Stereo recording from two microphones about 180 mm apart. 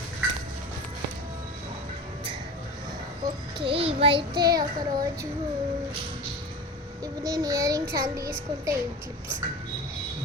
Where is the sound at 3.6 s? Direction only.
30° right (ahead or behind).